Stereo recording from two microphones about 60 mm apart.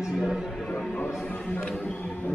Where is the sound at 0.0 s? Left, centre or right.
Centre.